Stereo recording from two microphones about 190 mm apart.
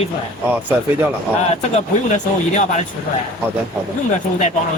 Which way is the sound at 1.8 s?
40° left (ahead or behind).